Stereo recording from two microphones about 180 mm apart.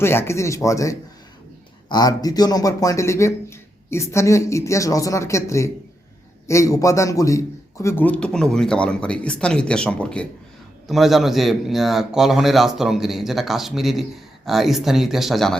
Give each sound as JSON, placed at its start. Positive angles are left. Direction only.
{"t": 0.0, "sound": "a man's voice", "side_deg": 15}